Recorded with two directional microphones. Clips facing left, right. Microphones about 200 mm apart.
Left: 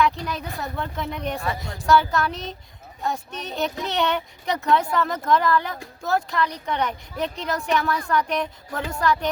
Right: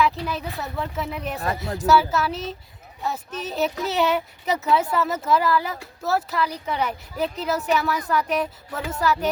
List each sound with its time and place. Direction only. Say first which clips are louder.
0.3 s speech: right 1 dB; centre (ahead or behind)
1.4 s a woman's voice: right 3 dB; 40° right (ahead or behind)
1.9 s speech: even; 5° right (ahead or behind)